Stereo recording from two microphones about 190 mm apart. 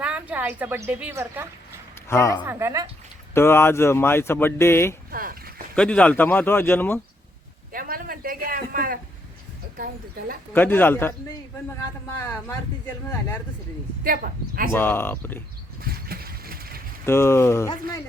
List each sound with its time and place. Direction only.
0.0 s a woman's voice: 5° right (ahead or behind)
2.0 s speech: 15° left (ahead or behind)
2.4 s a woman's voice: 10° right (ahead or behind)
3.3 s speech: 10° left (ahead or behind)
5.1 s speech: 50° right (ahead or behind)
5.7 s speech: 5° left (ahead or behind)
7.7 s a sound: 50° right (ahead or behind)
9.7 s speech: 50° right (ahead or behind)
10.5 s speech: 10° left (ahead or behind)
14.0 s speech: 50° right (ahead or behind)
14.7 s speech: 10° left (ahead or behind)
15.8 s vehicle: 50° right (ahead or behind)
17.1 s speech: 15° left (ahead or behind)